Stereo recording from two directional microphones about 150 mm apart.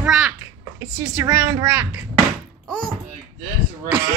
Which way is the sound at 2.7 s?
5° left (ahead or behind).